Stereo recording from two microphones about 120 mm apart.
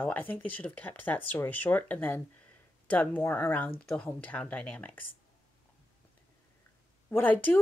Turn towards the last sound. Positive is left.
turn(degrees=15)  # may be behind; listen again after turning